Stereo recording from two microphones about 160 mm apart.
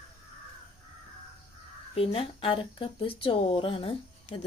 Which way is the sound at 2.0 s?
35° left (ahead or behind).